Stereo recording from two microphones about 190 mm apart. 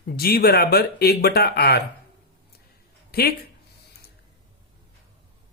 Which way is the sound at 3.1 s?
55° left (ahead or behind).